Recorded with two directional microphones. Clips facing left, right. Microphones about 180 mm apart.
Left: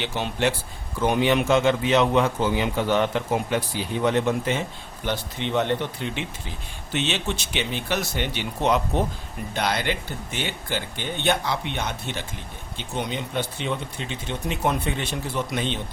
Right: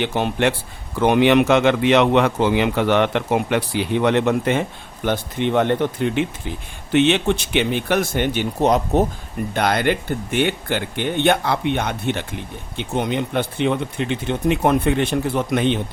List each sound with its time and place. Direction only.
0.0 s speech: 55° right (ahead or behind)
0.9 s a man's voice: 70° right (ahead or behind); by 9.0 s 40° right (ahead or behind)
9.6 s speech: 55° right (ahead or behind)